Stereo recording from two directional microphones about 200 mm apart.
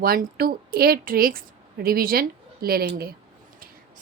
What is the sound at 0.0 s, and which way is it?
A woman's voice, 50° right (ahead or behind).